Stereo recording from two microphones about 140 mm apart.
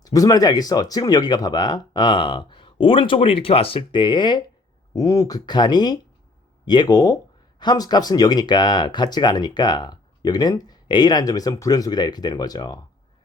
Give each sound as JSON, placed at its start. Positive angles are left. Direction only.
{"t": 0.0, "sound": "speech", "side_deg": 25}